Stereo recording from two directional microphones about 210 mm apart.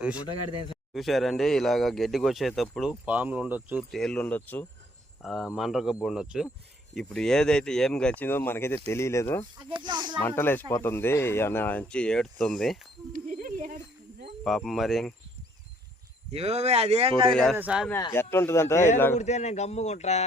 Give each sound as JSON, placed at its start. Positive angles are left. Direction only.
{"t": 0.2, "sound": "a man's voice", "side_deg": 20}
{"t": 0.9, "sound": "speech", "side_deg": 0}
{"t": 9.6, "sound": "speech", "side_deg": -20}
{"t": 10.2, "sound": "speech", "side_deg": 10}
{"t": 13.1, "sound": "snake", "side_deg": -40}
{"t": 14.4, "sound": "speech", "side_deg": 0}
{"t": 16.3, "sound": "speech", "side_deg": -30}
{"t": 17.3, "sound": "speech", "side_deg": 0}
{"t": 17.8, "sound": "speech", "side_deg": 10}
{"t": 19.1, "sound": "speech", "side_deg": 35}